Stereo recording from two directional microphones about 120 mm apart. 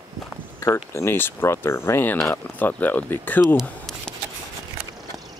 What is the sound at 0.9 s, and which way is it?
Speech, 20° left (ahead or behind).